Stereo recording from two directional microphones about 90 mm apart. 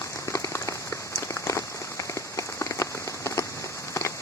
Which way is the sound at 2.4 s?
35° left (ahead or behind).